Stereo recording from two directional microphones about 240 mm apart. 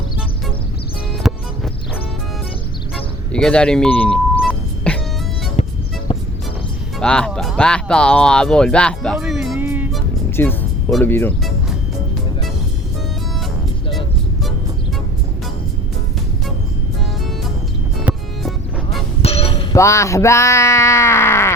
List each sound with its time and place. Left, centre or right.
1.2 s music: centre
3.3 s a sound: centre
5.6 s music: left
7.0 s speech: centre
10.3 s speech: centre
18.1 s music: centre
19.2 s a sound: left